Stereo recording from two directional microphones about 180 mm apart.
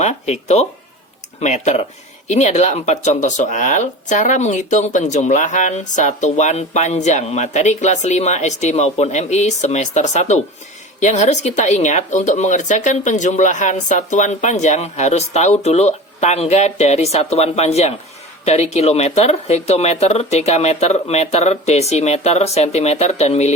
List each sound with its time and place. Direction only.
0.0 s speech: 40° left (ahead or behind)